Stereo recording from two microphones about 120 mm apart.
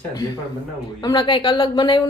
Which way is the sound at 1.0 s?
35° left (ahead or behind).